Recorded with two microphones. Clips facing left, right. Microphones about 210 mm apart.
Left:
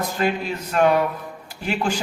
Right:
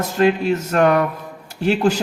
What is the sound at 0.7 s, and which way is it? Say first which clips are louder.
Speech: right 1 dB; 60° right (ahead or behind).